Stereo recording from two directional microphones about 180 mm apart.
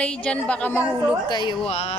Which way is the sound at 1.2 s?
25° left (ahead or behind).